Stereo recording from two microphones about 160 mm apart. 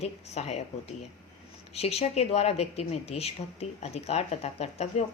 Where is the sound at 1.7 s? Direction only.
40° left (ahead or behind).